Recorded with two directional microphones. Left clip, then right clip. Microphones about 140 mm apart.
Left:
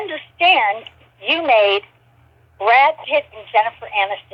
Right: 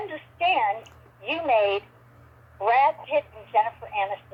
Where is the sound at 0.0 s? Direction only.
35° left (ahead or behind).